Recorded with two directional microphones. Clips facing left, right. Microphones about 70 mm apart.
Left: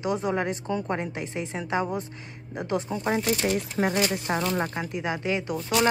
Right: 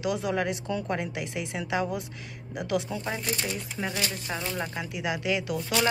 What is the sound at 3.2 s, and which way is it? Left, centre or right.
Speech, left.